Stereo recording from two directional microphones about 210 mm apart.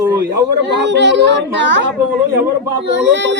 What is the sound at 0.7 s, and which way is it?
A child's voice, 55° right (ahead or behind).